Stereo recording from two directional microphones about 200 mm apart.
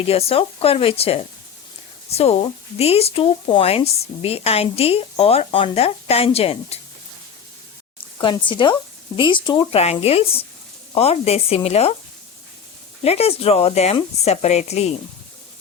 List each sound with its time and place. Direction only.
0.0 s speech: 30° left (ahead or behind)
8.2 s speech: 25° left (ahead or behind)
13.0 s speech: 30° left (ahead or behind)